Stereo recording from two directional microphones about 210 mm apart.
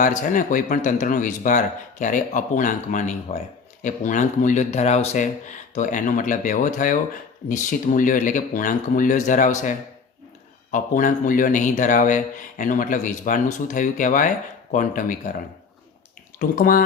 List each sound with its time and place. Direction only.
0.0 s speech: 40° left (ahead or behind)
16.4 s speech: 40° left (ahead or behind)